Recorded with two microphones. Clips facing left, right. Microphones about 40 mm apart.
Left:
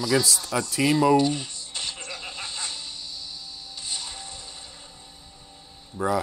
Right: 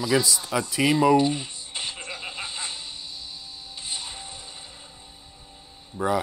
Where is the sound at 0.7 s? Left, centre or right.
Right.